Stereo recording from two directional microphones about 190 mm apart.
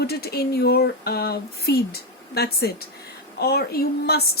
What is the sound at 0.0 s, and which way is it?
Speech, 55° left (ahead or behind).